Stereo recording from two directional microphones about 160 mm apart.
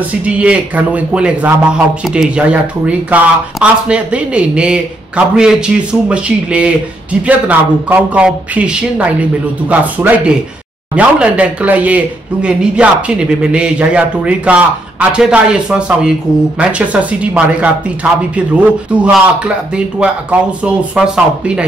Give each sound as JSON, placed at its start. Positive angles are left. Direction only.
{"t": 0.2, "sound": "a man's voice", "side_deg": -10}